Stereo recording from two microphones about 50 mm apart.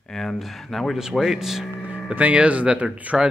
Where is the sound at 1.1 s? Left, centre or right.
Centre.